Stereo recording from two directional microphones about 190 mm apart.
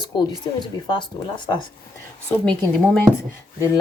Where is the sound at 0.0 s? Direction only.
25° left (ahead or behind).